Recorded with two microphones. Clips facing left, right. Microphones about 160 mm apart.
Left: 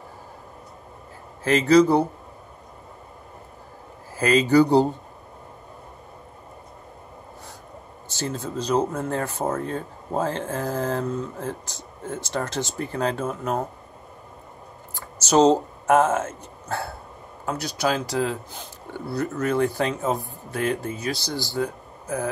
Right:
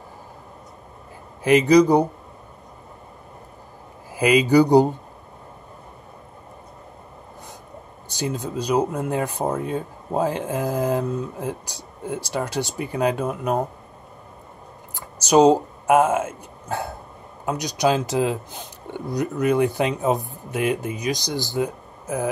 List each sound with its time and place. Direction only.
1.4 s speech: 15° right (ahead or behind)
4.1 s speech: 15° right (ahead or behind)
8.1 s speech: 15° right (ahead or behind)
15.0 s speech: 15° right (ahead or behind)